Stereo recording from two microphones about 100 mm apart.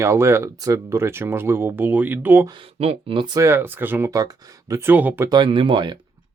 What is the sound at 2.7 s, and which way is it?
Speech, 80° right.